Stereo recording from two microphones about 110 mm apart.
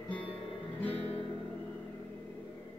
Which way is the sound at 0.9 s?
60° left (ahead or behind).